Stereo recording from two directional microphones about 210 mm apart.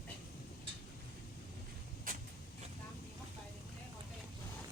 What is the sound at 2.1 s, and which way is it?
Vehicle, 40° right (ahead or behind).